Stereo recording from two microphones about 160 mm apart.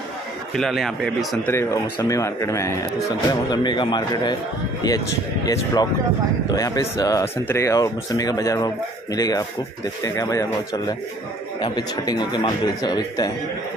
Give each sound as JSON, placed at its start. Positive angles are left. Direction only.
{"t": 0.6, "sound": "a man's voice", "side_deg": 0}
{"t": 1.5, "sound": "speech", "side_deg": 20}